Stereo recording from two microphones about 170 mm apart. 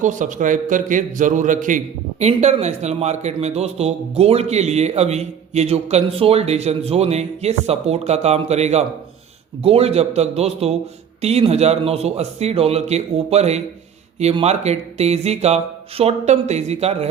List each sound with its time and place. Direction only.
0.0 s a man's voice: 45° right (ahead or behind)